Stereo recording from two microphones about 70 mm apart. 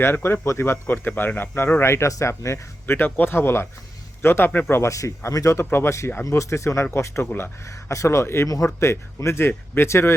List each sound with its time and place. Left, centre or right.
0.0 s speech: left
2.8 s speech: left
4.7 s speech: left
7.6 s speech: left
8.4 s speech: left